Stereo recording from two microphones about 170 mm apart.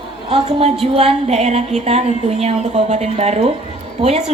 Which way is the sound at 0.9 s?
40° right (ahead or behind).